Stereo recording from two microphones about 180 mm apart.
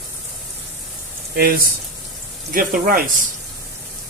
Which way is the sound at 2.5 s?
50° right (ahead or behind).